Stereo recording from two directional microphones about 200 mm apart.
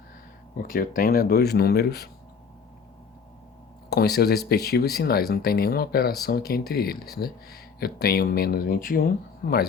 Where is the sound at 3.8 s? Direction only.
50° left (ahead or behind).